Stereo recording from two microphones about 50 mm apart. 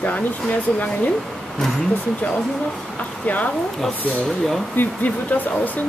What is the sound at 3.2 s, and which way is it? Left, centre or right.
Speech, left.